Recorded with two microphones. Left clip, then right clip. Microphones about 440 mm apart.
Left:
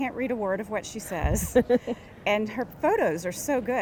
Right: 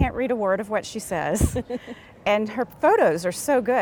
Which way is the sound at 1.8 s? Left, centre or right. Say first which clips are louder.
Right 2 dB; right.